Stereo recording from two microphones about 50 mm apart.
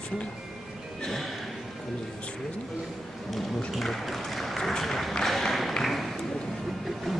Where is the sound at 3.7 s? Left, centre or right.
Centre.